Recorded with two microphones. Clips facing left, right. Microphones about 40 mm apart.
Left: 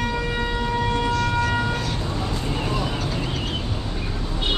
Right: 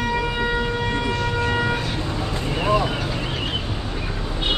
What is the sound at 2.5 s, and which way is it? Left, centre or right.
Vehicle, right.